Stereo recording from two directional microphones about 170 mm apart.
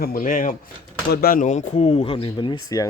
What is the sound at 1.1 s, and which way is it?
Speech, 60° left (ahead or behind).